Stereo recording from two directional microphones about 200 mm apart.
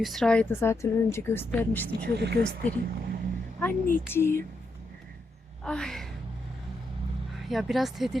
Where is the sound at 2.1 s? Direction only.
55° right (ahead or behind).